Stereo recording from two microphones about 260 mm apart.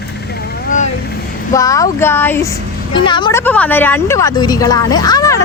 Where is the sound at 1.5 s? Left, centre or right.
Centre.